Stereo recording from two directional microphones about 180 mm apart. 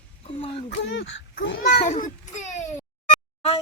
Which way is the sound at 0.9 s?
85° left.